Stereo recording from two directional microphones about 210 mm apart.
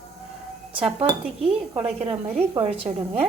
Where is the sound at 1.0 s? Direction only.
25° right (ahead or behind).